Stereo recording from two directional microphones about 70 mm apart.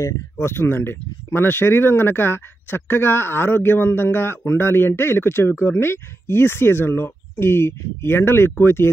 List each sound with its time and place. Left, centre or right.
0.0 s speech: left